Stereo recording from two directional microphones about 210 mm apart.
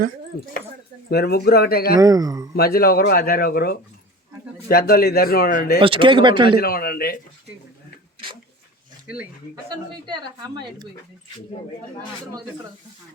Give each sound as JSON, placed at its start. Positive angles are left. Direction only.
{"t": 1.1, "sound": "speech", "side_deg": 50}
{"t": 2.0, "sound": "a man's voice", "side_deg": -15}
{"t": 2.6, "sound": "speech", "side_deg": 45}
{"t": 5.8, "sound": "a woman's voice", "side_deg": -25}
{"t": 6.6, "sound": "speech", "side_deg": 45}
{"t": 9.6, "sound": "a woman's voice", "side_deg": -20}